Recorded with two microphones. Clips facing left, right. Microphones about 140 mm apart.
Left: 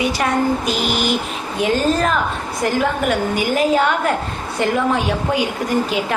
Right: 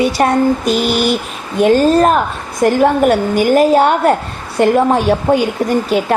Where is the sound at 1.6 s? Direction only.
45° right (ahead or behind).